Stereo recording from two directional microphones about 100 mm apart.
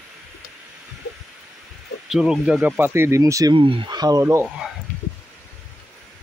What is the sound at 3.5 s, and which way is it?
Speech, 60° right (ahead or behind).